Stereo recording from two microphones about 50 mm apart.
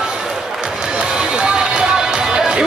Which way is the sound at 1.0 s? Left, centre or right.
Centre.